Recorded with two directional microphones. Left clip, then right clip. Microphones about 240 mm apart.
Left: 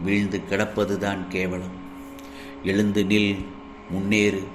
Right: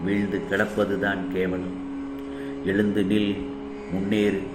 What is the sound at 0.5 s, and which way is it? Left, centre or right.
Speech, left.